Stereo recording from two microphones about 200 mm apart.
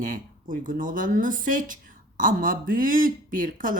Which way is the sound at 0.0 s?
45° right (ahead or behind).